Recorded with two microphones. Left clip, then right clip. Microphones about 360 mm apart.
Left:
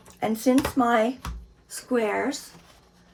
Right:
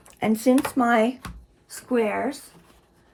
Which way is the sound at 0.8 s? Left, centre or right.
Right.